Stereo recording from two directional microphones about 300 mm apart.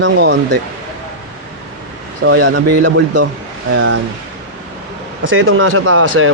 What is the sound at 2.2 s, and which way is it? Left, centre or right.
Speech, right.